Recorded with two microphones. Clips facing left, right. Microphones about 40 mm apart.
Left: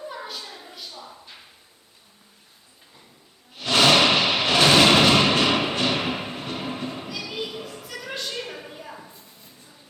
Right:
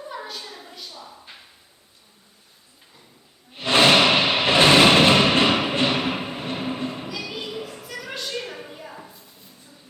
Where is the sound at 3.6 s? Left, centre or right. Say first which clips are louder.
Right 2 dB; right.